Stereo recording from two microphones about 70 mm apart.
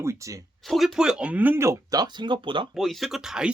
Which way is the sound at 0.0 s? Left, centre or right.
Right.